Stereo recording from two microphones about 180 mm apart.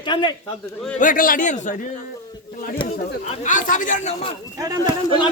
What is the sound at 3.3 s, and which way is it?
A man's voice, 45° left (ahead or behind).